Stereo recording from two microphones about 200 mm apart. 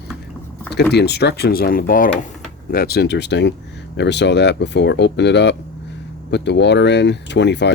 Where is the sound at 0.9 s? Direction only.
55° left (ahead or behind).